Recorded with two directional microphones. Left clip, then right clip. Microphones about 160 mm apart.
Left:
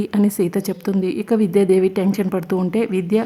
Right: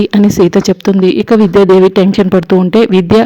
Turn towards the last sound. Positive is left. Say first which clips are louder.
# right 12 dB
turn(degrees=-35)  # may be behind; listen again after turning